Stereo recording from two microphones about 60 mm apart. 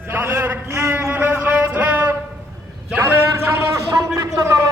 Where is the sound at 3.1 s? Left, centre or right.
Right.